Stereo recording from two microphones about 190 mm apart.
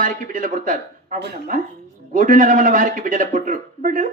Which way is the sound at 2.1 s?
45° right (ahead or behind).